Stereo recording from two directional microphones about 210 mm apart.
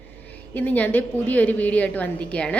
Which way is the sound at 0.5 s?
5° left (ahead or behind).